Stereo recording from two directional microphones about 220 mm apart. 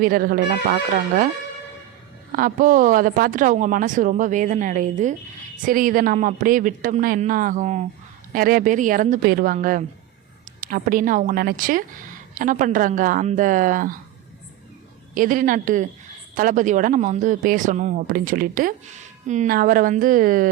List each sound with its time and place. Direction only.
0.0 s speech: 40° right (ahead or behind)
2.3 s speech: 40° right (ahead or behind)
15.1 s speech: 40° right (ahead or behind)